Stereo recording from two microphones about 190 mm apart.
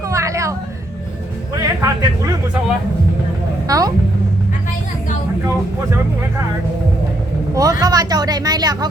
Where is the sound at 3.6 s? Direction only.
20° right (ahead or behind).